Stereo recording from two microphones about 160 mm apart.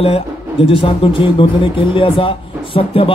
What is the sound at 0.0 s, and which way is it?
Speech, 35° left (ahead or behind).